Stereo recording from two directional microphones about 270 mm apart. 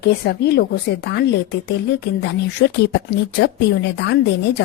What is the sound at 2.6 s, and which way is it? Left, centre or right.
A woman's voice, left.